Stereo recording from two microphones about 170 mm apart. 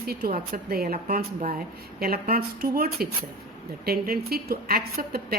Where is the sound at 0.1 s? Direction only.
65° right (ahead or behind).